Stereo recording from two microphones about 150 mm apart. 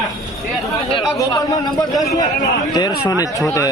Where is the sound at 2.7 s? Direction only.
25° left (ahead or behind).